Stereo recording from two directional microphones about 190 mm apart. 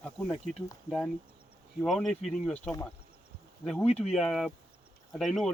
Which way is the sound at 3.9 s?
35° left (ahead or behind).